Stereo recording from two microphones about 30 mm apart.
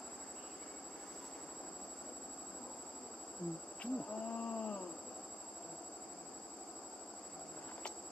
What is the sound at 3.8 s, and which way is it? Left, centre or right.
Wild animals, left.